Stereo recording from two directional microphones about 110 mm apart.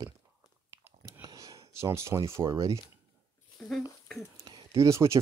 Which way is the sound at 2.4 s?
30° right (ahead or behind).